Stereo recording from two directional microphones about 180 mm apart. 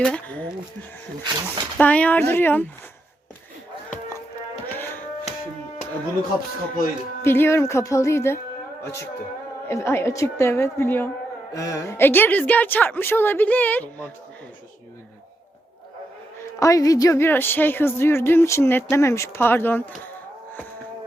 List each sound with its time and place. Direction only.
0.0 s a woman's voice: 5° left (ahead or behind)
1.2 s speech: 25° right (ahead or behind)
1.8 s a woman's voice: 10° left (ahead or behind)
4.6 s music: 10° left (ahead or behind)
7.2 s a woman's voice: 15° left (ahead or behind)
16.4 s a woman's voice: 15° left (ahead or behind)